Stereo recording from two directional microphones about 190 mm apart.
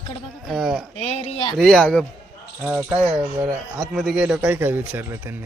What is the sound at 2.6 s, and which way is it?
Speech, 10° right (ahead or behind).